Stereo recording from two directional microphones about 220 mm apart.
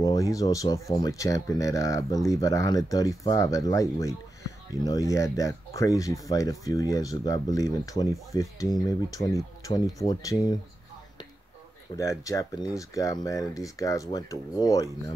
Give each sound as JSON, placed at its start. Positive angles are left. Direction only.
{"t": 0.0, "sound": "speech", "side_deg": 15}
{"t": 12.0, "sound": "speech", "side_deg": 15}